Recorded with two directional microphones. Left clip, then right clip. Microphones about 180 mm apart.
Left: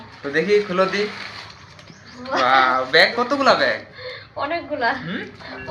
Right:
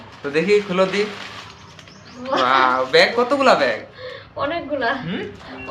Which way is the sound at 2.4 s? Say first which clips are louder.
Even; 5° right (ahead or behind).